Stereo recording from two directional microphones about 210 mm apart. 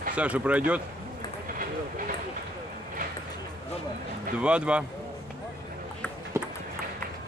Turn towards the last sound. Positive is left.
turn(degrees=-10)  # may be behind; listen again after turning